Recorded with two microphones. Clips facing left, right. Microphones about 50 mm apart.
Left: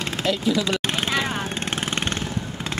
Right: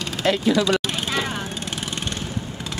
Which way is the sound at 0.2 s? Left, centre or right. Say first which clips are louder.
Right 4 dB; right.